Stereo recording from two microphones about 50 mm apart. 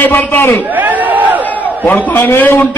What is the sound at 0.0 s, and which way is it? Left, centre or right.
Speech, left.